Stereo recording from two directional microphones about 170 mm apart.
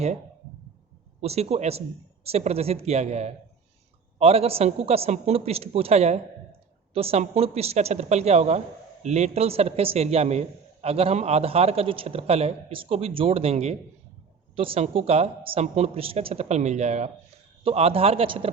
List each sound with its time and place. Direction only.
1.2 s a man's voice: 35° right (ahead or behind)